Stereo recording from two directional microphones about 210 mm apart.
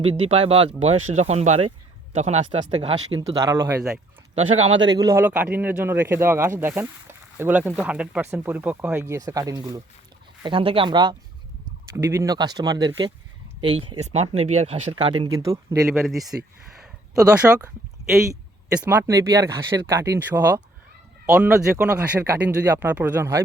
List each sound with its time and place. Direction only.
0.1 s speech: 30° right (ahead or behind)
3.2 s speech: 15° right (ahead or behind)
4.4 s speech: 30° right (ahead or behind)
4.9 s speech: 15° right (ahead or behind)
15.4 s speech: 15° right (ahead or behind)
16.0 s speech: centre (ahead or behind)
16.8 s a sound: 5° right (ahead or behind)
18.7 s speech: 5° right (ahead or behind)